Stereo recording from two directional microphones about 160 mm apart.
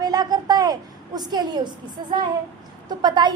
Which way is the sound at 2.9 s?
25° right (ahead or behind).